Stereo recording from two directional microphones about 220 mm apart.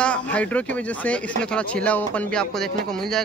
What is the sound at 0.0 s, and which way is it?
Speech, 5° left (ahead or behind).